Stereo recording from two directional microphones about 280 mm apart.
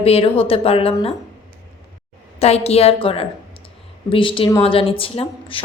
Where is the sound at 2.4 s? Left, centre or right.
Left.